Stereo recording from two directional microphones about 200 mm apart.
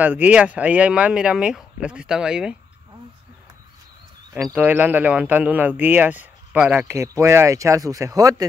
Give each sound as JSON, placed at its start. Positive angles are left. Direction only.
{"t": 0.0, "sound": "speech", "side_deg": -10}
{"t": 4.4, "sound": "speech", "side_deg": -5}